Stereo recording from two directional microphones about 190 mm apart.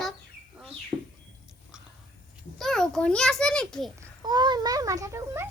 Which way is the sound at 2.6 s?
5° left (ahead or behind).